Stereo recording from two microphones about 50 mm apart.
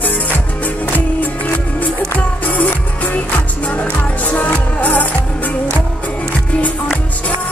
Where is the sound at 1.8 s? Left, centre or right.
Left.